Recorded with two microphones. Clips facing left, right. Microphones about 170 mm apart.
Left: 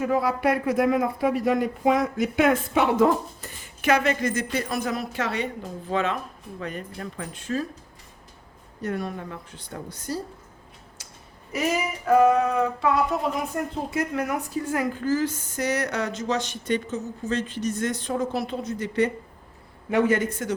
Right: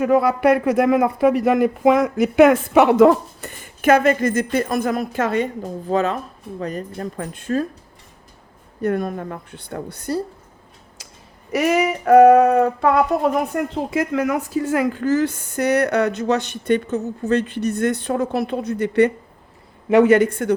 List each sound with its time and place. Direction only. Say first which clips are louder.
0.0 s speech: right 7 dB; 70° right (ahead or behind); by 7.7 s 55° right (ahead or behind)
8.8 s speech: right 8 dB; 55° right (ahead or behind)
11.5 s speech: right 8 dB; 70° right (ahead or behind)
19.9 s speech: right 9 dB; 75° right (ahead or behind)